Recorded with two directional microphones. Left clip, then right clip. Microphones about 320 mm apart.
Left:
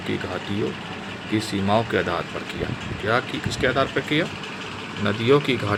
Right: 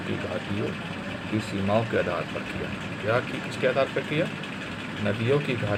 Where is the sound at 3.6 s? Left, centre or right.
Left.